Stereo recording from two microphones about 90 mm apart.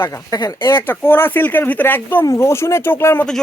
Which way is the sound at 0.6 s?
25° left (ahead or behind).